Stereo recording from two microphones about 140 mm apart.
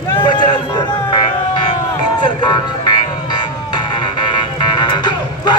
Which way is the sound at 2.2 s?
30° left (ahead or behind).